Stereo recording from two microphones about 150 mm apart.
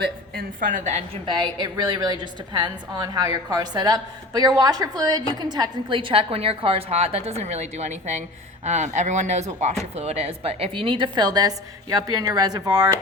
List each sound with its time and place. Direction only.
0.0 s a woman's voice: 70° right (ahead or behind); by 1.2 s 50° right (ahead or behind)
1.3 s a woman's voice: 30° right (ahead or behind)